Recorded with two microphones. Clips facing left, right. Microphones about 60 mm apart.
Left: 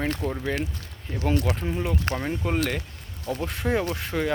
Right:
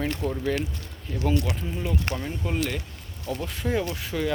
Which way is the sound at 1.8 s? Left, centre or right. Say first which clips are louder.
Left 2 dB; left.